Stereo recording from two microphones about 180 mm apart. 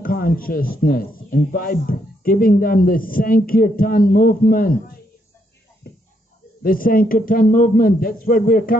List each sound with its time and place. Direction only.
0.0 s speech: 55° left (ahead or behind)
6.6 s speech: 55° left (ahead or behind)